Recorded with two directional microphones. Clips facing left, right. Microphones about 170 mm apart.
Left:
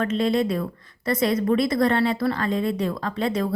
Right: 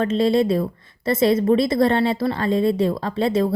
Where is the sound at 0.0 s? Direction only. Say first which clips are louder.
Right 4 dB; 30° right (ahead or behind).